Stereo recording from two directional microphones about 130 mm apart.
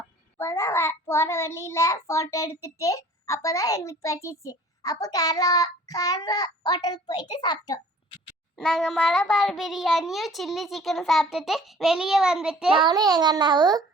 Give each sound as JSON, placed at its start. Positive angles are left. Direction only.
{"t": 0.3, "sound": "a child's voice", "side_deg": 20}
{"t": 8.5, "sound": "a child's voice", "side_deg": 5}
{"t": 12.7, "sound": "a child's voice", "side_deg": -35}